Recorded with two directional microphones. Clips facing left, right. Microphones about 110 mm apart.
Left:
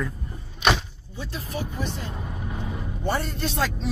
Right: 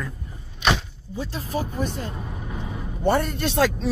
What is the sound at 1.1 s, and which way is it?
Speech, 35° right (ahead or behind).